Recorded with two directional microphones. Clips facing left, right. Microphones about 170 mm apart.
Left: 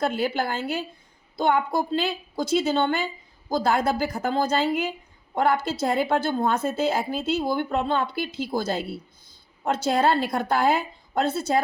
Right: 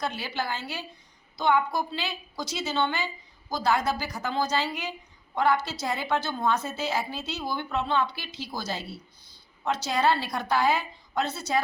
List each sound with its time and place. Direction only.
0.0 s a woman's voice: 50° left (ahead or behind)